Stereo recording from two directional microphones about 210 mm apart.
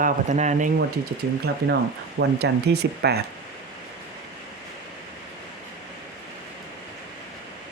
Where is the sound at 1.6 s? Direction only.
55° right (ahead or behind).